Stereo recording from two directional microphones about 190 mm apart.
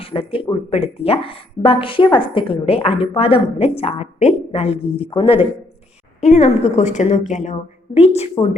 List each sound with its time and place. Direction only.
0.0 s a woman's voice: 30° left (ahead or behind)